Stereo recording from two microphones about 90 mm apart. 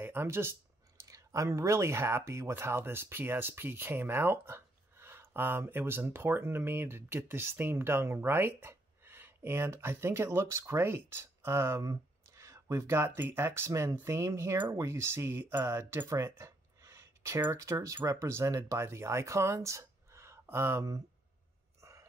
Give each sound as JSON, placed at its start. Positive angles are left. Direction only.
{"t": 0.0, "sound": "speech", "side_deg": -25}